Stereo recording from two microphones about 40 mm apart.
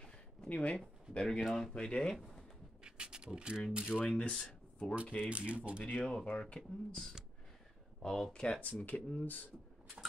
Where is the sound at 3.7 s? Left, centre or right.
Right.